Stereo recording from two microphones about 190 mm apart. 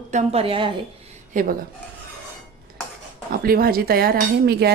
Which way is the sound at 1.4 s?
40° right (ahead or behind).